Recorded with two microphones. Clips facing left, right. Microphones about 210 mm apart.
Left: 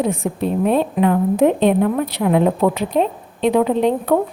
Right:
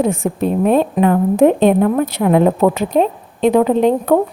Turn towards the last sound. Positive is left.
turn(degrees=-45)  # may be behind; listen again after turning